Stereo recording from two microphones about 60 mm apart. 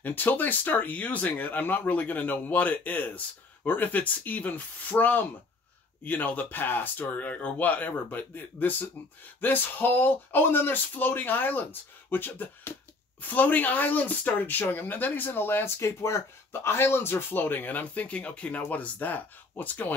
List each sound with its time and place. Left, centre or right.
0.0 s speech: left